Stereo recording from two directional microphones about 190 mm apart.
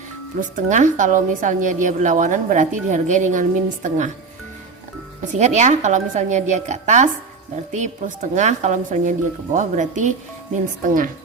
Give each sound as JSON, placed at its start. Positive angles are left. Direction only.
{"t": 0.3, "sound": "a woman's voice", "side_deg": -40}
{"t": 5.2, "sound": "a woman's voice", "side_deg": -40}